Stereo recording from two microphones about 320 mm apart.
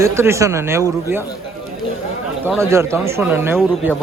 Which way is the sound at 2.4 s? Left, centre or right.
Centre.